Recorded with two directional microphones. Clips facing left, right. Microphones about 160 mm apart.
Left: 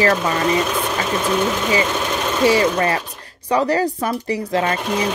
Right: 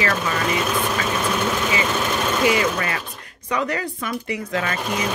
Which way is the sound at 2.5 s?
35° left (ahead or behind).